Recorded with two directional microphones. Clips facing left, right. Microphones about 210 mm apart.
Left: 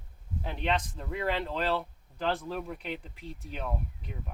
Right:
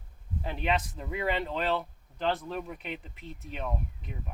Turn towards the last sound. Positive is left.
turn(degrees=0)  # may be behind; listen again after turning